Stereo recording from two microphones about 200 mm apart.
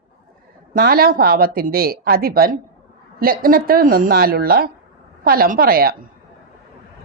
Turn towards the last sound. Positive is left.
turn(degrees=-50)  # may be behind; listen again after turning